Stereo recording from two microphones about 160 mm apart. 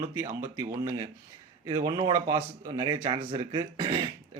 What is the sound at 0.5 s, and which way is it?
Speech, 15° right (ahead or behind).